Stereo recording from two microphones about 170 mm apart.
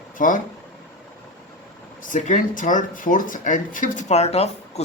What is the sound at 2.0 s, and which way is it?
Speech, 50° left (ahead or behind).